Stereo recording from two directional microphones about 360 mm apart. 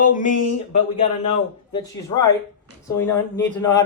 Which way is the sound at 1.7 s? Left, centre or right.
Centre.